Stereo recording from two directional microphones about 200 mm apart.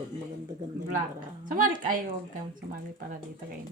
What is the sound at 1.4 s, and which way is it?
Speech, 40° right (ahead or behind).